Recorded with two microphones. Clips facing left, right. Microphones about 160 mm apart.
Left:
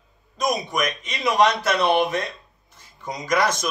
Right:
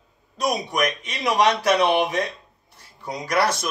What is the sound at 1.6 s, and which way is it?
Speech, 15° right (ahead or behind).